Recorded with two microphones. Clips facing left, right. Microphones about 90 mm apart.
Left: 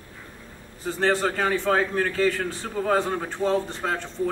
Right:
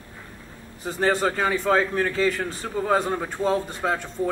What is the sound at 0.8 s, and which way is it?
A man's voice, 15° right (ahead or behind).